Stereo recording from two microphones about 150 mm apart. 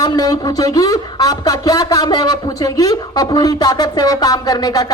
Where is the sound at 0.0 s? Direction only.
25° left (ahead or behind).